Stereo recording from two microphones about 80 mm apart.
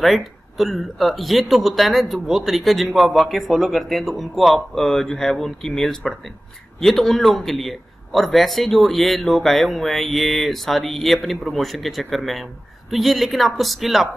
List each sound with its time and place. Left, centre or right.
0.0 s speech: centre